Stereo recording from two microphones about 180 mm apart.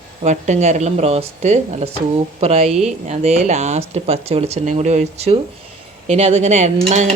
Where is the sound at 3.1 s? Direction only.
40° right (ahead or behind).